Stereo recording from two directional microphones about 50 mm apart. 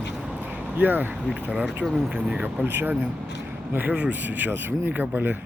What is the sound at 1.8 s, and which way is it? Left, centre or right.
Speech, centre.